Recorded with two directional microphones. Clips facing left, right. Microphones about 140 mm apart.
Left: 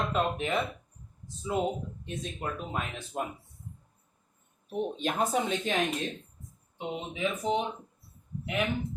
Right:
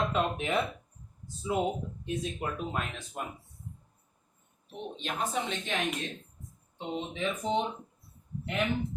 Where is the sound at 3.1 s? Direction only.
20° left (ahead or behind).